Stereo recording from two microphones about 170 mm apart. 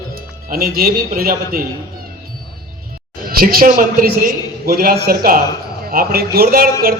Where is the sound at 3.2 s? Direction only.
60° right (ahead or behind).